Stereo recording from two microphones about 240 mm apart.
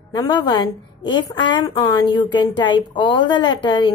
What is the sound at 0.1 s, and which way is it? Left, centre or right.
A woman's voice, centre.